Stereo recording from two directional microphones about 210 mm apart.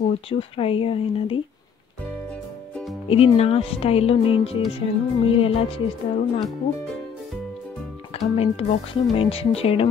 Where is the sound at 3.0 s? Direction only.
25° left (ahead or behind).